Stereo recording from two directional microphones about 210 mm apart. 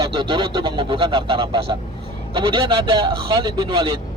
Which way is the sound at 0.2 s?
20° right (ahead or behind).